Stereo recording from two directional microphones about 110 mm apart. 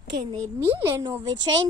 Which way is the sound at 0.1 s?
45° right (ahead or behind).